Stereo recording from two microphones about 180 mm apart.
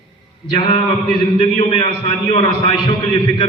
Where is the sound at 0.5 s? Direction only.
25° left (ahead or behind).